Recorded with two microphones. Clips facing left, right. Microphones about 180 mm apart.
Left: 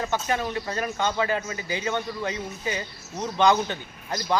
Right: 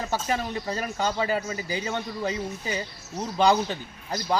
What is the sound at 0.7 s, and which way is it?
Speech, 35° right (ahead or behind).